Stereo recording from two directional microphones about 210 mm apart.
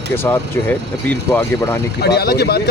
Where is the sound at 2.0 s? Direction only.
50° left (ahead or behind).